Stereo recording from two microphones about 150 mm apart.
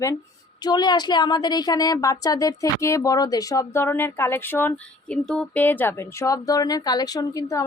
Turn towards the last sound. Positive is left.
turn(degrees=20)  # may be behind; listen again after turning